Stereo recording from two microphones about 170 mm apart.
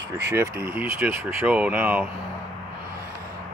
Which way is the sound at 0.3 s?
15° right (ahead or behind).